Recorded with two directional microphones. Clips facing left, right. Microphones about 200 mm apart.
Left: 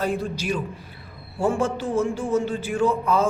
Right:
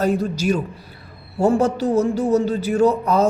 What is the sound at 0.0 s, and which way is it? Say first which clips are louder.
A man's voice: right 6 dB; 40° right (ahead or behind).